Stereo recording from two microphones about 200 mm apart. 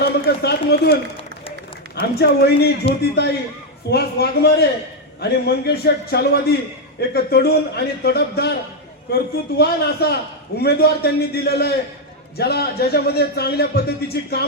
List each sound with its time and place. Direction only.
0.0 s speech: 55° left (ahead or behind)
2.0 s a man's voice: 50° left (ahead or behind)